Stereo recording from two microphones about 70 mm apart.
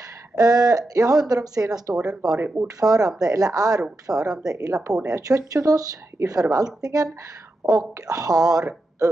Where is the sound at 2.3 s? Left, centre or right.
Right.